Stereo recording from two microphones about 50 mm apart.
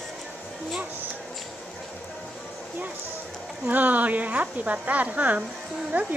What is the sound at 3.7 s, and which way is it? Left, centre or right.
Speech, right.